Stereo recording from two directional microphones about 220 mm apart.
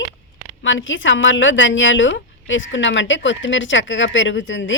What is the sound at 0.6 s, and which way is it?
Speech, 60° left (ahead or behind).